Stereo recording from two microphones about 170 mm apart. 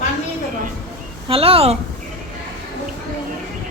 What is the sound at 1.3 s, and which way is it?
Speech, 35° right (ahead or behind).